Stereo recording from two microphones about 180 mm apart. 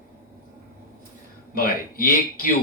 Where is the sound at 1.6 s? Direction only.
55° left (ahead or behind).